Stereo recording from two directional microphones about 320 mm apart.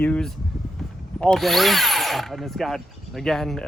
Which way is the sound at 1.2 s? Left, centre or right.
Centre.